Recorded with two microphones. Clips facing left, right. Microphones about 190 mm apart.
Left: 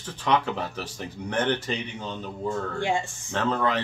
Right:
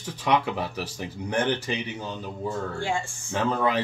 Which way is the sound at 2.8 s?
20° left (ahead or behind).